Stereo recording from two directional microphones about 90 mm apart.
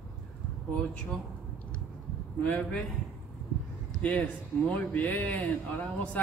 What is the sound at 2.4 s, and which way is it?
Speech, 15° left (ahead or behind).